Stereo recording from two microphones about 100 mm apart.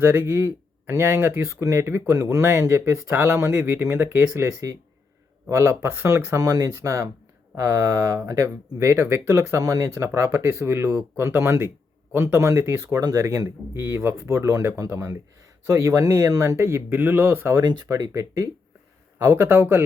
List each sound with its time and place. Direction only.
0.3 s speech: 25° right (ahead or behind)
12.9 s speech: 40° right (ahead or behind)
17.6 s speech: 40° right (ahead or behind); by 19.8 s 20° right (ahead or behind)